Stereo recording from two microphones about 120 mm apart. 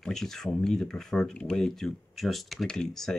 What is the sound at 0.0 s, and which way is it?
Speech, 5° left (ahead or behind).